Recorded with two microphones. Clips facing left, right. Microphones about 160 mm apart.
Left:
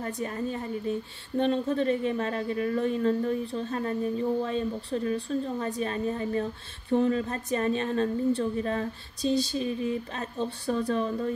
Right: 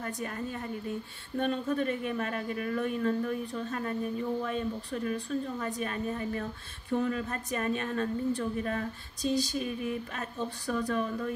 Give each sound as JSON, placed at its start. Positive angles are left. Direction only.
{"t": 0.0, "sound": "a woman's voice", "side_deg": 25}